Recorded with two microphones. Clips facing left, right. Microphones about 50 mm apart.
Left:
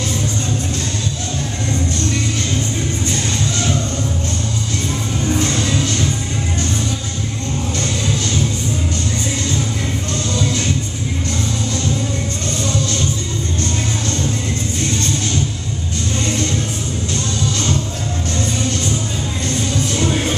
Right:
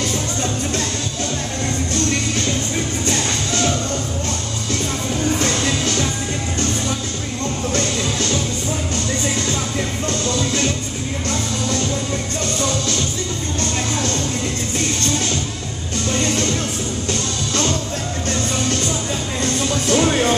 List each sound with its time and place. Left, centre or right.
19.9 s music: right